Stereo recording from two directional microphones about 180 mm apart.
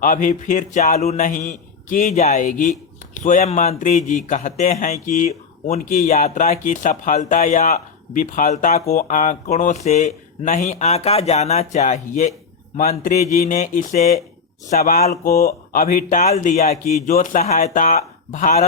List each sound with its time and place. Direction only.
0.0 s speech: 50° left (ahead or behind)
13.3 s speech: 50° left (ahead or behind)